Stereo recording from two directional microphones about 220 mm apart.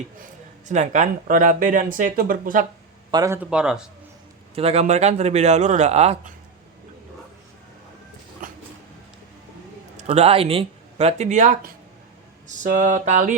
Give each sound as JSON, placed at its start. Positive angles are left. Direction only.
{"t": 0.7, "sound": "speech", "side_deg": -35}
{"t": 3.1, "sound": "speech", "side_deg": -15}
{"t": 4.5, "sound": "speech", "side_deg": -25}
{"t": 8.4, "sound": "a sound", "side_deg": -35}
{"t": 10.0, "sound": "speech", "side_deg": -30}